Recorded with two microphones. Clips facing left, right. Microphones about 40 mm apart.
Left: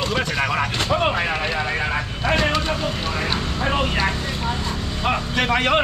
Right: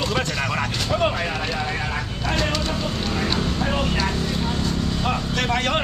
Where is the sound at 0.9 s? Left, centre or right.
Left.